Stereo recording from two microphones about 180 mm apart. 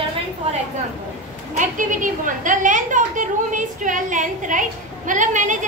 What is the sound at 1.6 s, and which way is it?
A woman's voice, 45° right (ahead or behind).